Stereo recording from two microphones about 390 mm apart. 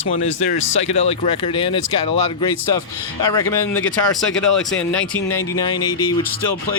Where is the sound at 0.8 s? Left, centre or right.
Centre.